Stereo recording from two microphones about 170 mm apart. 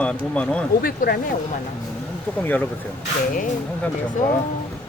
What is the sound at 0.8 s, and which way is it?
Speech, 60° left (ahead or behind).